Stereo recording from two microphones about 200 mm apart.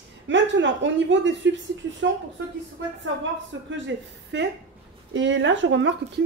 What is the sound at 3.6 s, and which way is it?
Speech, 65° right (ahead or behind).